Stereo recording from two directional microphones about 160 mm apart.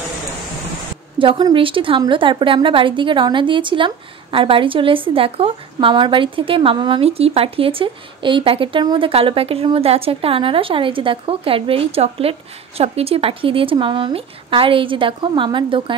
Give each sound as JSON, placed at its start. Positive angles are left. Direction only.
{"t": 1.2, "sound": "a woman's voice", "side_deg": -30}